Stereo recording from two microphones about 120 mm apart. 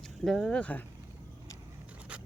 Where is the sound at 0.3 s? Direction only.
5° left (ahead or behind).